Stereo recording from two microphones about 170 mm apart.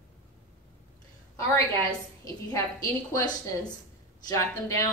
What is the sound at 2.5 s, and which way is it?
A woman's voice, 20° left (ahead or behind).